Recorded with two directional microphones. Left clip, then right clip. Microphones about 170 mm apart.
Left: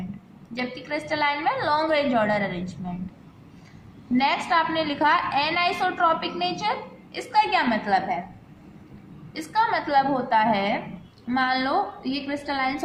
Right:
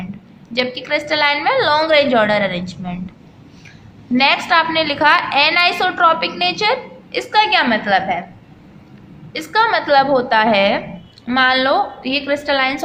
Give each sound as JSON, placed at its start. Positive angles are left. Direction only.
{"t": 0.5, "sound": "a woman's voice", "side_deg": -20}
{"t": 4.2, "sound": "a woman's voice", "side_deg": -20}
{"t": 9.3, "sound": "a woman's voice", "side_deg": -25}